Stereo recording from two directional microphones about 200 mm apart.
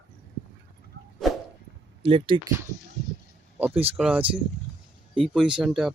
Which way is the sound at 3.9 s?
5° right (ahead or behind).